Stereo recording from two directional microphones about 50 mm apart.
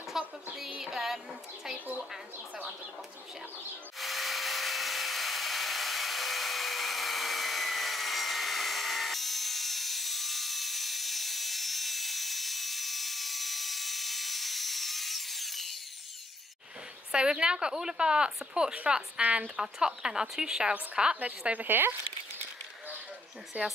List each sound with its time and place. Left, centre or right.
0.2 s a sound: centre
0.7 s music: centre
4.0 s wood: centre
17.1 s speech: centre
21.6 s speech: right
23.5 s speech: right